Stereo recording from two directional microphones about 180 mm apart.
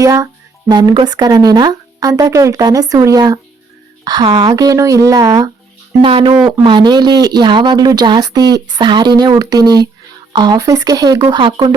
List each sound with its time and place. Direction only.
0.0 s speech: 20° right (ahead or behind)